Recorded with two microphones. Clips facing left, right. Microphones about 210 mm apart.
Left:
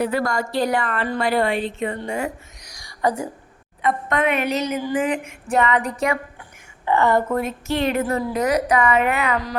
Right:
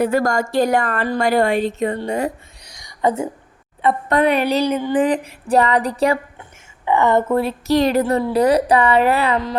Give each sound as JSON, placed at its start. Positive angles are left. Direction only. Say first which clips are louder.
{"t": 0.0, "sound": "a woman's voice", "louder": "right 4 dB", "side_deg": -45}
{"t": 2.7, "sound": "whispering", "louder": "right 3 dB", "side_deg": -25}
{"t": 3.8, "sound": "a woman's voice", "louder": "right 4 dB", "side_deg": -35}
{"t": 6.8, "sound": "a woman's voice", "louder": "right 2 dB", "side_deg": -15}